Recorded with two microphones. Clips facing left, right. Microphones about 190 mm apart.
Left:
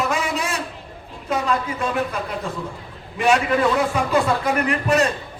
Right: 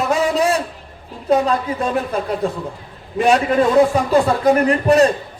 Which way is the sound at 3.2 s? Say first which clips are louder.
Right 4 dB; 35° right (ahead or behind).